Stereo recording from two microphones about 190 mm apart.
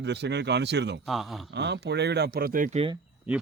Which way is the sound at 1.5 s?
65° right (ahead or behind).